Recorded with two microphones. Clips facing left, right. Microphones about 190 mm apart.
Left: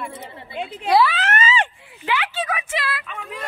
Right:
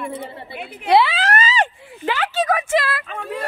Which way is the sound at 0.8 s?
25° right (ahead or behind).